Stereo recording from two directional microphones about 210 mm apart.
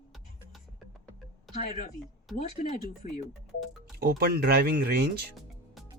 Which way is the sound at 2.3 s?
Centre (ahead or behind).